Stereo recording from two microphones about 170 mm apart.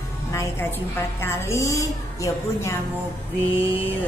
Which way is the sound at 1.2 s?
15° left (ahead or behind).